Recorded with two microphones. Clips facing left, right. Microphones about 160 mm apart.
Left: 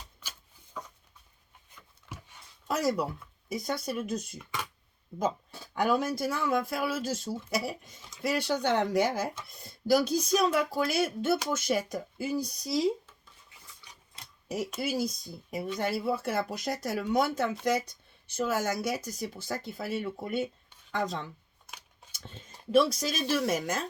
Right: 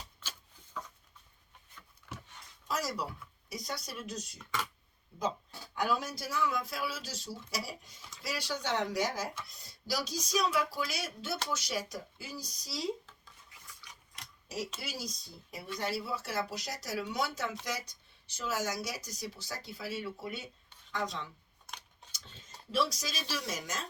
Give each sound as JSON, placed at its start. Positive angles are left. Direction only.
{"t": 0.2, "sound": "shuffling cards", "side_deg": 10}
{"t": 2.6, "sound": "speech", "side_deg": 55}
{"t": 5.7, "sound": "speech", "side_deg": 55}
{"t": 14.4, "sound": "speech", "side_deg": 55}
{"t": 22.7, "sound": "speech", "side_deg": 55}